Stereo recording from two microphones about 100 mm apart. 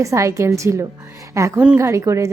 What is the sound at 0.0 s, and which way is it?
Speech, 30° right (ahead or behind).